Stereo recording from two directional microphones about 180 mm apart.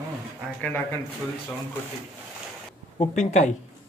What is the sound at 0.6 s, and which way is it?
Speech, 10° left (ahead or behind).